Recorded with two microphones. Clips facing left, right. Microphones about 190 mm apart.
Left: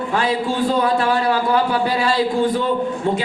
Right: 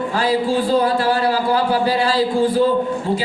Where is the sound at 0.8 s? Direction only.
30° right (ahead or behind).